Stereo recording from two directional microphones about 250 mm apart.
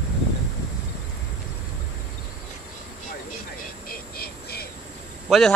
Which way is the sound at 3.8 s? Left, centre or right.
Left.